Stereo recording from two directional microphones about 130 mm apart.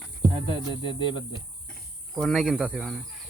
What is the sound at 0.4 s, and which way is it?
Speech, 35° left (ahead or behind).